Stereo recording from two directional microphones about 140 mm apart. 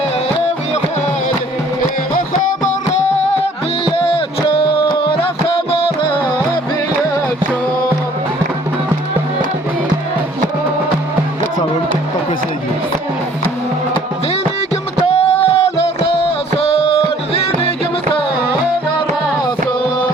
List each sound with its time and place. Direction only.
3.8 s music: 40° left (ahead or behind)
15.0 s music: 45° left (ahead or behind)